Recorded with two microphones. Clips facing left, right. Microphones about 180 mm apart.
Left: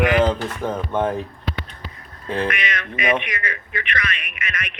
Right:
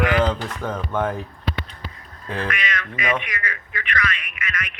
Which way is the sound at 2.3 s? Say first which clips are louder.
Left 3 dB; 20° left (ahead or behind).